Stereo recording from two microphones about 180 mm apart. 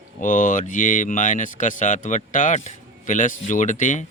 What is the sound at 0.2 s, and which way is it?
A man's voice, 45° left (ahead or behind).